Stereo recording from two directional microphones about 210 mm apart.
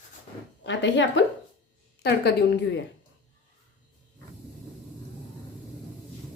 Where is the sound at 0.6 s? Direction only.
60° left (ahead or behind).